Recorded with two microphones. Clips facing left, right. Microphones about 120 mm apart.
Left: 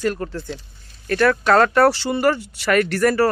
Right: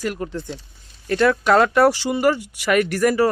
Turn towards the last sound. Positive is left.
turn(degrees=-15)  # may be behind; listen again after turning